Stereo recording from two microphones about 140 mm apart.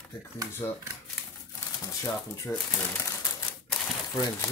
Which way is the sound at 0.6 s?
20° left (ahead or behind).